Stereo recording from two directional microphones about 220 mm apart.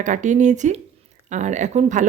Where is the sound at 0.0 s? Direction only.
35° right (ahead or behind).